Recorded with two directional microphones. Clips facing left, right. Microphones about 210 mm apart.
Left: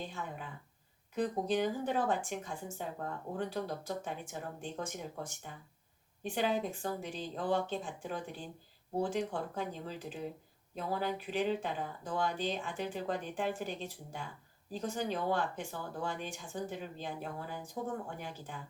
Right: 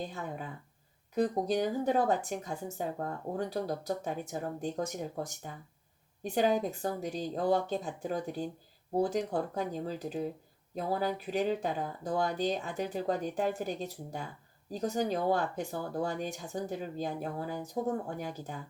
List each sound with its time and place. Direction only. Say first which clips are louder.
0.0 s speech: right 4 dB; 40° right (ahead or behind)